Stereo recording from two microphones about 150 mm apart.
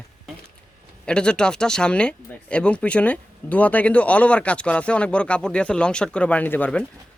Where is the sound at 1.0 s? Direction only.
5° left (ahead or behind).